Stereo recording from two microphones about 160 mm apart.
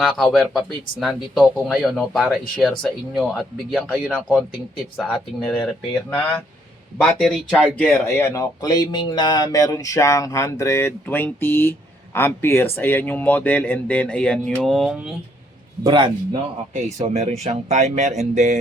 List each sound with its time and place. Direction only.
0.3 s speech: centre (ahead or behind)
7.0 s speech: centre (ahead or behind)
8.0 s speech: 20° left (ahead or behind); by 15.1 s 5° right (ahead or behind)
15.8 s a man's voice: 30° right (ahead or behind)
16.7 s speech: 45° right (ahead or behind)